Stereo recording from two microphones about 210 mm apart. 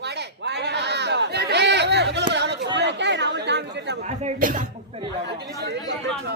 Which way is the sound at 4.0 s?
35° right (ahead or behind).